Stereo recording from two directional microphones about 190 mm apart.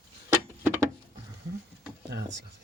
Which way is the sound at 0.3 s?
10° right (ahead or behind).